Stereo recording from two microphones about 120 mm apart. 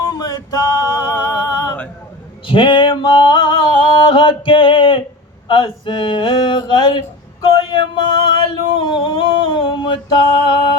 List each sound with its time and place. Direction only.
0.1 s male singing: 35° left (ahead or behind)
2.5 s music: 45° left (ahead or behind)
5.5 s a sound: 45° left (ahead or behind)